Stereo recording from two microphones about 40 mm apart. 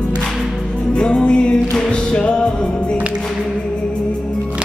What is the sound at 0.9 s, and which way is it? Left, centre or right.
Music, left.